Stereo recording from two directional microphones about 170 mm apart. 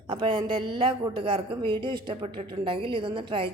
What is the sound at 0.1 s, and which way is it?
A woman's voice, 30° right (ahead or behind).